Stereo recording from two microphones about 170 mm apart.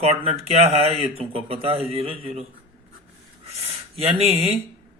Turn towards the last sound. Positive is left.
turn(degrees=-35)  # may be behind; listen again after turning